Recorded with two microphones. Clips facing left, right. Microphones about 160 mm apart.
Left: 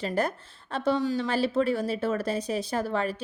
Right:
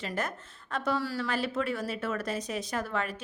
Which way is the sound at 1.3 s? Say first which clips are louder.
Left 6 dB; 30° left (ahead or behind).